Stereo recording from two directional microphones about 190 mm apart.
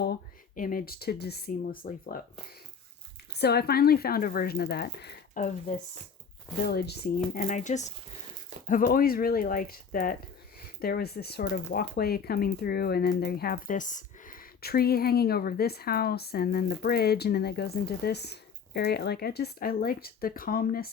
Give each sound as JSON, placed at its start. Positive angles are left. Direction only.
{"t": 0.0, "sound": "speech", "side_deg": 50}
{"t": 3.3, "sound": "speech", "side_deg": 60}
{"t": 5.4, "sound": "speech", "side_deg": 40}
{"t": 6.7, "sound": "speech", "side_deg": 60}
{"t": 7.3, "sound": "speech", "side_deg": 40}